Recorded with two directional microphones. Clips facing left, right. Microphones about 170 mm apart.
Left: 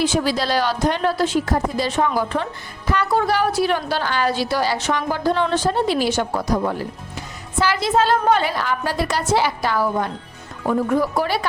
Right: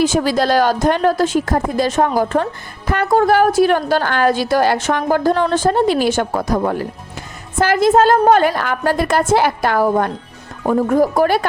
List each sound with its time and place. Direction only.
0.0 s a woman's voice: 45° right (ahead or behind)